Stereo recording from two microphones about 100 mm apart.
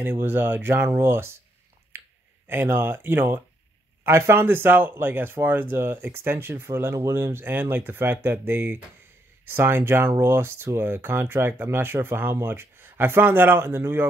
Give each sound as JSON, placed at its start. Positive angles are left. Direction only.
{"t": 0.0, "sound": "speech", "side_deg": -20}
{"t": 2.4, "sound": "speech", "side_deg": -20}